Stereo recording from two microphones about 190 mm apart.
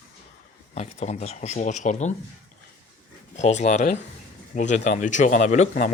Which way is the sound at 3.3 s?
35° left (ahead or behind).